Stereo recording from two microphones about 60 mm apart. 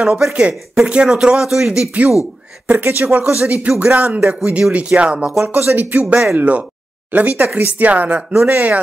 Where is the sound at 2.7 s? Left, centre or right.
Right; by 5.3 s centre.